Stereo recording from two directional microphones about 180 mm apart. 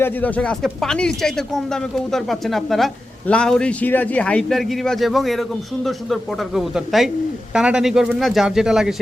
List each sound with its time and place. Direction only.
0.0 s speech: 10° left (ahead or behind)